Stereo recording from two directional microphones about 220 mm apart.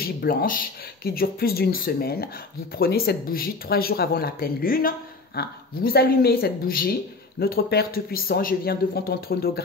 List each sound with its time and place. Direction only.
0.0 s speech: 45° left (ahead or behind)